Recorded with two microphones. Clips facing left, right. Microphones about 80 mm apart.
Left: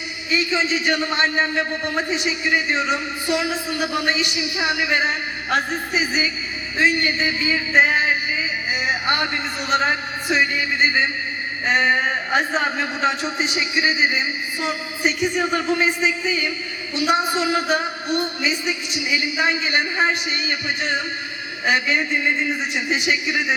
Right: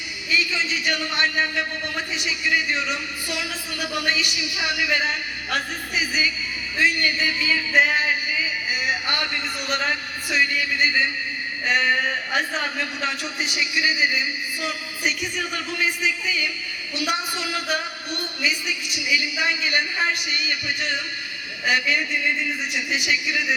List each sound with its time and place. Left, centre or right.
0.3 s a man's voice: left